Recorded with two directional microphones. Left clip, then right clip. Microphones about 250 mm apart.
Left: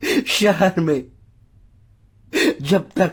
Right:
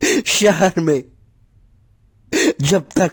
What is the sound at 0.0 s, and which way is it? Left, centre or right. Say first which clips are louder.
Speech: right 3 dB; right.